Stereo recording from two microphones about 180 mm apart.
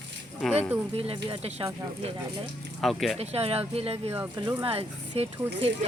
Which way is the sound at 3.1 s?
35° right (ahead or behind).